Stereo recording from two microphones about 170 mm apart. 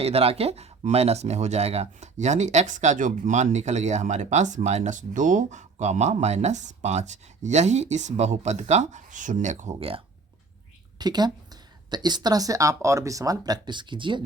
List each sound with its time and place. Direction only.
0.0 s speech: 35° right (ahead or behind)
9.7 s a woman's voice: 30° right (ahead or behind)